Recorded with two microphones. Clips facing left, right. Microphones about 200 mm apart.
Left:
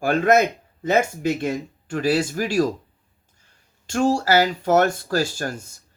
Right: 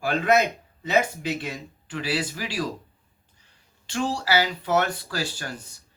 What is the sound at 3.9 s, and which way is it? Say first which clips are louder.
Speech: left 6 dB; 45° left (ahead or behind).